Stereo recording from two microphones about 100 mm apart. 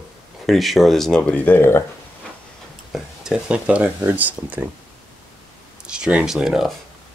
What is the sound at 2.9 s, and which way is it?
Speech, 5° right (ahead or behind).